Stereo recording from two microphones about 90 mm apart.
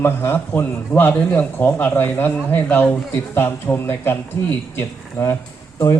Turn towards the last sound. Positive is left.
turn(degrees=35)  # may be behind; listen again after turning